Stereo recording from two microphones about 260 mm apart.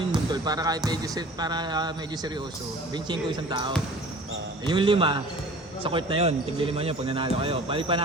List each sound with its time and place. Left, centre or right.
0.1 s music: centre
0.9 s speech: centre